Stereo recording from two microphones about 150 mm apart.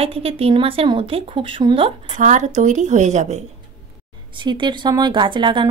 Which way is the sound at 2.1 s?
55° right (ahead or behind).